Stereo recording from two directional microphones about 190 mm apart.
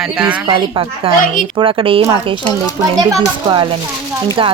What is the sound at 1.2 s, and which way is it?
Speech, 45° left (ahead or behind).